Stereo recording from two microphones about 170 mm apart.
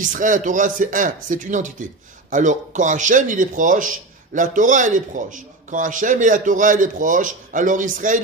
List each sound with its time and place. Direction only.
0.0 s a man's voice: 50° right (ahead or behind)